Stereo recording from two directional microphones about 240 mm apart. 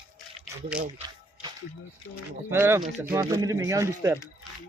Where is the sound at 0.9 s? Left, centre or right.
Centre.